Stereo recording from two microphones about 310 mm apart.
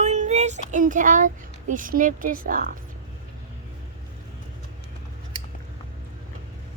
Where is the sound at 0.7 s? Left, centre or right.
Right.